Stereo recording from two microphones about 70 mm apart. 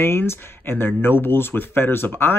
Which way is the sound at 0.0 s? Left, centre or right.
Left.